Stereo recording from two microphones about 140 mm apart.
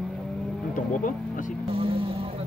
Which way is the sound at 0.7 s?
70° left (ahead or behind).